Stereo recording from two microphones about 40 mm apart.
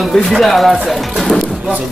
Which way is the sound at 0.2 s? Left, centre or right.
Centre.